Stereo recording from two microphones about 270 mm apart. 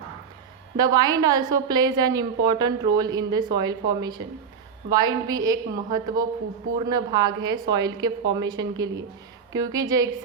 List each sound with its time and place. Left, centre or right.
0.8 s a woman's voice: centre